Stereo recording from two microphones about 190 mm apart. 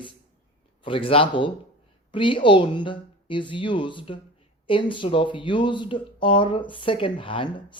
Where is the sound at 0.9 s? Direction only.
30° left (ahead or behind).